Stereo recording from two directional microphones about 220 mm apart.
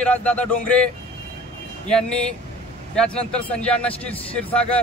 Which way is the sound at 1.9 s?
5° left (ahead or behind).